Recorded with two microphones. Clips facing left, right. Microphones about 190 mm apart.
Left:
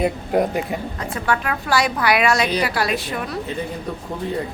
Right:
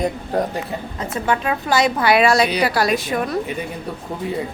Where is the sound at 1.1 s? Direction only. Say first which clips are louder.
Right 2 dB; 20° right (ahead or behind); by 3.3 s 45° right (ahead or behind).